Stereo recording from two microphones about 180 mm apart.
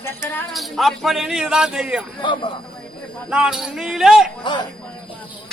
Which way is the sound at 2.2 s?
25° left (ahead or behind).